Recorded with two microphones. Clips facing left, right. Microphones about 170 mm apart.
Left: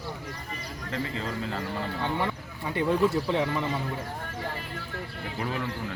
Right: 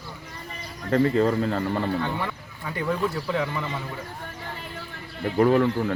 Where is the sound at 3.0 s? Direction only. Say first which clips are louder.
Left 2 dB; 20° left (ahead or behind).